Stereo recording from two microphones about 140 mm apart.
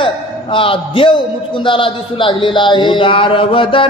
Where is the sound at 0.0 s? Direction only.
40° left (ahead or behind).